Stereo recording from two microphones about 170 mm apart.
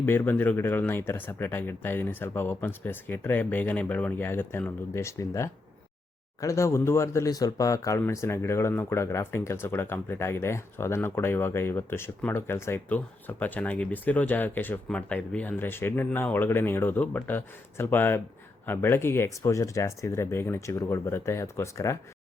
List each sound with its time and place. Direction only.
0.0 s speech: 10° left (ahead or behind)